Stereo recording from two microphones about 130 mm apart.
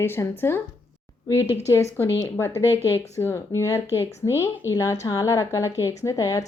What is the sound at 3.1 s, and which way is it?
Speech, 20° left (ahead or behind).